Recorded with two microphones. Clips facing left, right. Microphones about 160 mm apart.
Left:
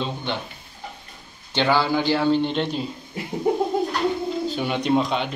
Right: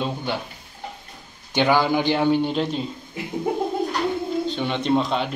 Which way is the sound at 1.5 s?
15° right (ahead or behind).